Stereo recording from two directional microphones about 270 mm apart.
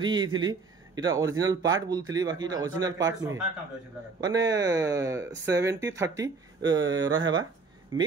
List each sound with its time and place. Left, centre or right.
0.0 s a man's voice: centre